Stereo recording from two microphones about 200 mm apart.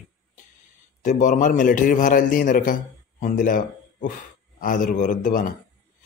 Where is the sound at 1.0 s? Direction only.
40° left (ahead or behind).